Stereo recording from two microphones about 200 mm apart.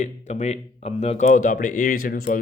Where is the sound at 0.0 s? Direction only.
35° left (ahead or behind).